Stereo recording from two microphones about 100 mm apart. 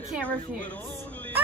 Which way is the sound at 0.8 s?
20° left (ahead or behind).